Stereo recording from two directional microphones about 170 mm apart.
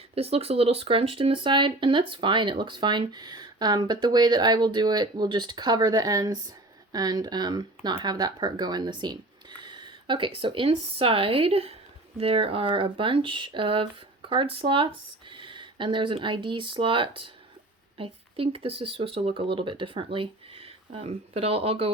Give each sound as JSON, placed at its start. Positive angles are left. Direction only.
{"t": 0.1, "sound": "speech", "side_deg": -35}